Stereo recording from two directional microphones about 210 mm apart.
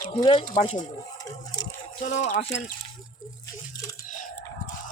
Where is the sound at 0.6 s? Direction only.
25° left (ahead or behind).